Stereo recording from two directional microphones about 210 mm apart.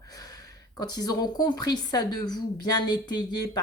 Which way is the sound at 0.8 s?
20° left (ahead or behind).